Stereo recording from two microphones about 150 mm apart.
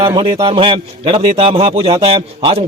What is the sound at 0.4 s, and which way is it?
A man's voice, 35° right (ahead or behind).